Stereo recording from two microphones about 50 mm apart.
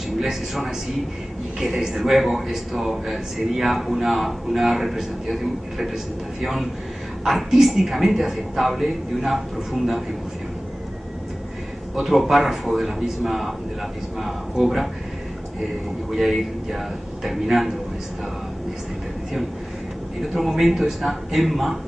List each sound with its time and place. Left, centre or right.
0.2 s speech: centre
11.9 s speech: centre
16.1 s speech: centre
20.2 s speech: centre